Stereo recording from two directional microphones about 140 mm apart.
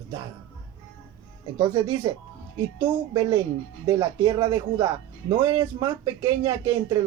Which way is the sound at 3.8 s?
30° right (ahead or behind).